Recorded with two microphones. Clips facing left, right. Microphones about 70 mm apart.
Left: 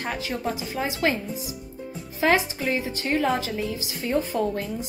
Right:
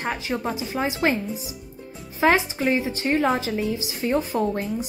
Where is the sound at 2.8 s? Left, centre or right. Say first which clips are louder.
Right 3 dB; right.